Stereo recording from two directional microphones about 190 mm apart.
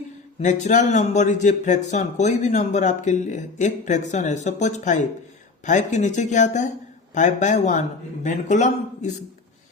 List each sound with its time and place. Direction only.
0.3 s speech: 40° left (ahead or behind)